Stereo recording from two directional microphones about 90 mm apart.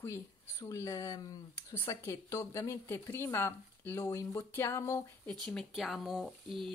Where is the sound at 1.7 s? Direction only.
30° left (ahead or behind).